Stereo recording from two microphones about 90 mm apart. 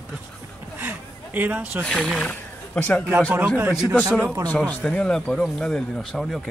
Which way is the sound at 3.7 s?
5° right (ahead or behind).